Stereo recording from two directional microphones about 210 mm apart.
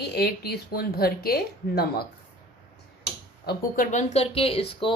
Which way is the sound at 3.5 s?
40° left (ahead or behind).